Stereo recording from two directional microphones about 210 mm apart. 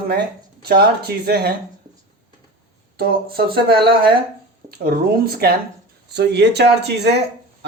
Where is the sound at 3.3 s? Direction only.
45° right (ahead or behind).